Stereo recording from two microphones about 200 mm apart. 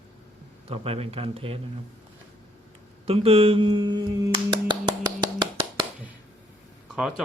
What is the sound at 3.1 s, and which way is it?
Speech, 30° right (ahead or behind).